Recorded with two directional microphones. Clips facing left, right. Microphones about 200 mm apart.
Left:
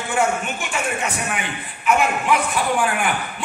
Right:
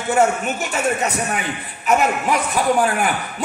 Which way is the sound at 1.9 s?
40° right (ahead or behind).